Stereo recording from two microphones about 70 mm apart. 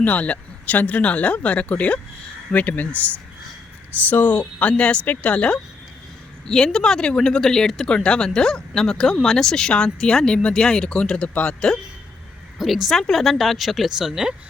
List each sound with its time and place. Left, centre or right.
0.0 s speech: left
4.1 s speech: centre
12.5 s speech: centre